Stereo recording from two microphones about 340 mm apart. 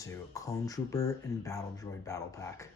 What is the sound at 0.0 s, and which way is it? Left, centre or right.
Speech, centre.